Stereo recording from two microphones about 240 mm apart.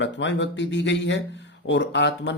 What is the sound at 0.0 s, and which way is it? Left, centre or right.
Speech, left.